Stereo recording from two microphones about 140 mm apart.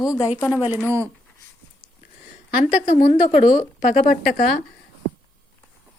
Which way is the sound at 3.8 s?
75° left (ahead or behind).